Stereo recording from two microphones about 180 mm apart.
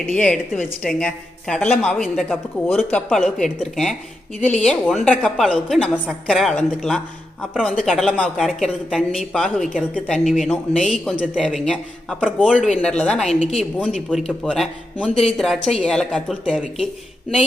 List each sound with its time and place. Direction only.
0.1 s speech: 5° left (ahead or behind)
12.8 s speech: 5° left (ahead or behind)
13.2 s a woman's voice: 35° left (ahead or behind)
13.8 s speech: centre (ahead or behind)